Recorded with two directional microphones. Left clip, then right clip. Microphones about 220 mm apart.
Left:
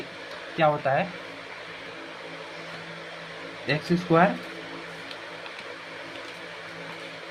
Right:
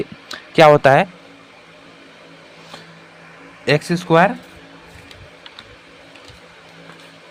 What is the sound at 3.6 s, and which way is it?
Speech, 40° right (ahead or behind).